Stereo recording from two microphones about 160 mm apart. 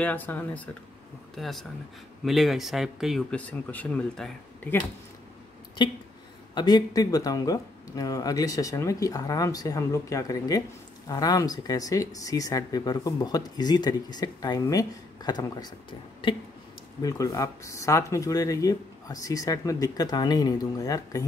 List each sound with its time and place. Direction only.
0.0 s speech: 10° left (ahead or behind)
5.8 s speech: 30° left (ahead or behind)
17.0 s speech: 20° left (ahead or behind)